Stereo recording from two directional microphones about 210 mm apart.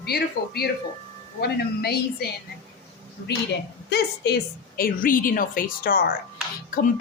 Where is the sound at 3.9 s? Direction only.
50° left (ahead or behind).